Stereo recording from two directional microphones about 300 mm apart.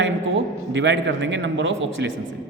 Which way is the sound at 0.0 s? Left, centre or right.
Right.